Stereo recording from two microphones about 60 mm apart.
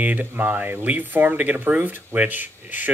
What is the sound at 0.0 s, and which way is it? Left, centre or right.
Speech, right.